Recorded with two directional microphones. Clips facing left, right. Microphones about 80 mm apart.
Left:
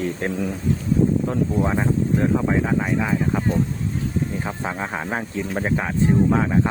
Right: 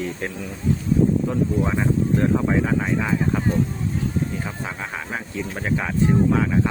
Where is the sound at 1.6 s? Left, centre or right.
Centre.